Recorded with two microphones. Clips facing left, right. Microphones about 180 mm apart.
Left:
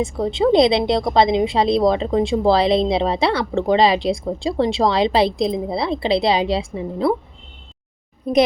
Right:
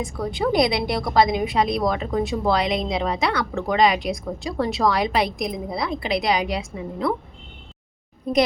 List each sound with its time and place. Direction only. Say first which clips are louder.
0.0 s a woman's voice: left 6 dB; 25° left (ahead or behind)